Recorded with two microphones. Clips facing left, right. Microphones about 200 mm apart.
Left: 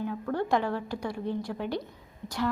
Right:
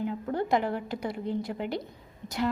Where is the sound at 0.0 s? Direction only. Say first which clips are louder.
Even; 20° right (ahead or behind).